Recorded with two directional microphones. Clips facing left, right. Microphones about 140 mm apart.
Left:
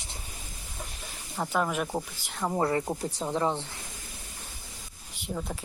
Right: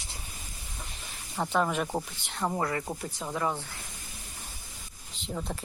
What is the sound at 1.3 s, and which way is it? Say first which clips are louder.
Speech: right 1 dB; centre (ahead or behind).